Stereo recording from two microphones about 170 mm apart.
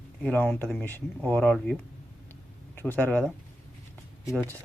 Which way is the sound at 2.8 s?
10° left (ahead or behind).